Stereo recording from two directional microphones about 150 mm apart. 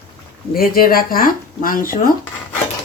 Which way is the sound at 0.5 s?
75° left (ahead or behind).